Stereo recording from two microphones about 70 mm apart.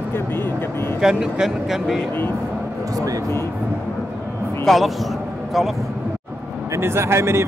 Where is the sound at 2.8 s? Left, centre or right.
Right.